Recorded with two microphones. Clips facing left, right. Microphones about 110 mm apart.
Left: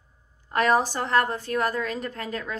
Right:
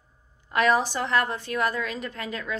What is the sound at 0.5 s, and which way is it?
A woman's voice, 40° left (ahead or behind).